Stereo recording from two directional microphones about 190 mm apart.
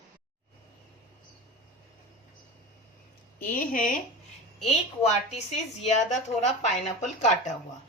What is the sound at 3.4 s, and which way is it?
Speech, 45° left (ahead or behind).